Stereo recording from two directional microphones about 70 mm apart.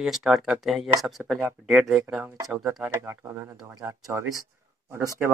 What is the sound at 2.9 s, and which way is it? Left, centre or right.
Speech, right.